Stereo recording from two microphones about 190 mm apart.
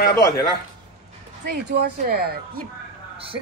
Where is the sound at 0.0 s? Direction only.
55° left (ahead or behind).